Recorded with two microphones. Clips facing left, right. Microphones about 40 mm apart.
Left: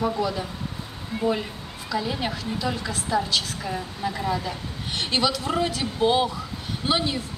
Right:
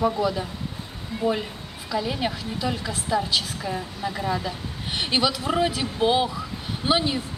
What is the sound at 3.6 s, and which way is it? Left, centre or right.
A woman's voice, centre.